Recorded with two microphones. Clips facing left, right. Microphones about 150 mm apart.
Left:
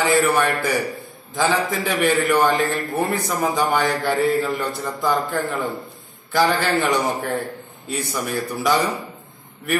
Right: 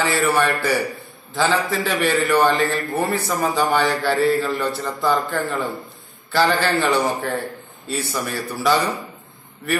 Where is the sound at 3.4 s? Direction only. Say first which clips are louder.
Right 1 dB; 15° left (ahead or behind).